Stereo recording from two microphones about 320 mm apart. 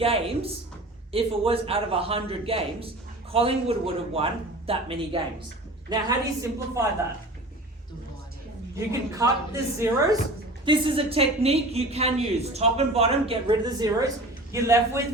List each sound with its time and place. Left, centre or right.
0.0 s a man's voice: centre
8.7 s a man's voice: centre